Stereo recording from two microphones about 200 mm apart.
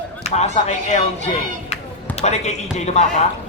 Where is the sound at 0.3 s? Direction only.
35° left (ahead or behind).